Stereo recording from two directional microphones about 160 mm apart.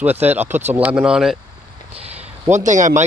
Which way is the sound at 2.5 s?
50° right (ahead or behind).